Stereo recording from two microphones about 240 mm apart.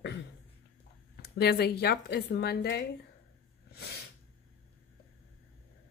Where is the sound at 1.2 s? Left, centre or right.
Left.